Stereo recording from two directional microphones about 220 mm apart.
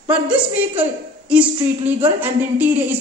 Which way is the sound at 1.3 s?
25° right (ahead or behind).